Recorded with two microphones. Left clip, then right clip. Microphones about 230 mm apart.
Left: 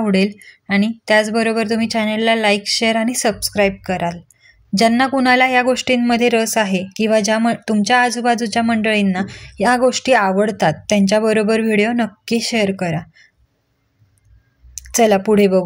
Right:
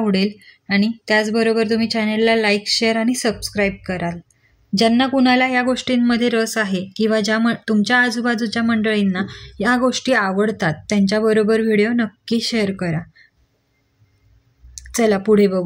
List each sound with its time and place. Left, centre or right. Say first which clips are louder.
0.0 s speech: left 2 dB; centre
14.7 s speech: left 4 dB; left